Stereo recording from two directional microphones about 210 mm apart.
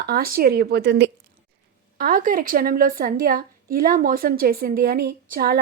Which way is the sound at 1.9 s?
40° right (ahead or behind).